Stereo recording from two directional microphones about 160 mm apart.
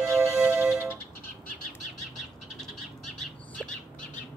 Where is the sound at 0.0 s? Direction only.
20° right (ahead or behind).